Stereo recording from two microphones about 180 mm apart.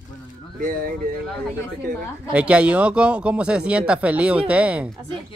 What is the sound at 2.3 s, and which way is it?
Speech, 5° right (ahead or behind).